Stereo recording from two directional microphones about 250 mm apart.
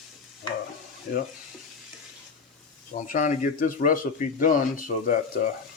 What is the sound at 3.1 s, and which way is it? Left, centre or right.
Speech, left.